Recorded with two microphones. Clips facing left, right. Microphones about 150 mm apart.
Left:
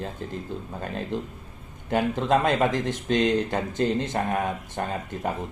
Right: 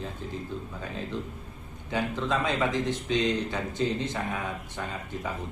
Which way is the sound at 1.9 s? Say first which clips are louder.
Left 6 dB; 50° left (ahead or behind).